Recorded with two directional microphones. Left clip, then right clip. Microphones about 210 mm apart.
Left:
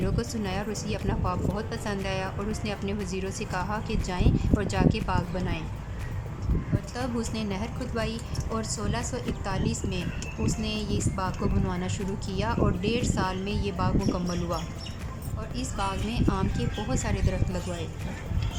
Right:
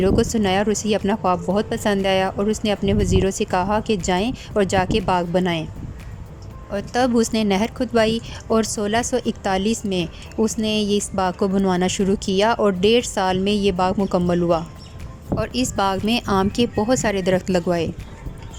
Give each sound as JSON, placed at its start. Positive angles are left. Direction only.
{"t": 0.0, "sound": "speech", "side_deg": -35}
{"t": 6.9, "sound": "speech", "side_deg": -40}